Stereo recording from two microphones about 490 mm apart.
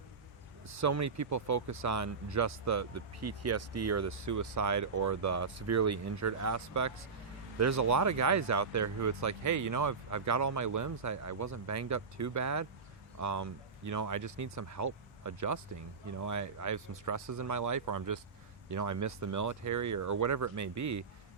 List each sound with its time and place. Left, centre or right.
0.7 s speech: right